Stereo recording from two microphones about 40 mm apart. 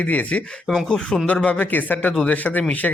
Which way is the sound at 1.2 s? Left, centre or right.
Left.